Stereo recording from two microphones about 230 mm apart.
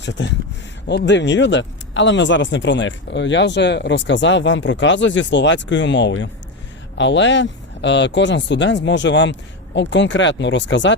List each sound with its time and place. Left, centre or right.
0.9 s speech: left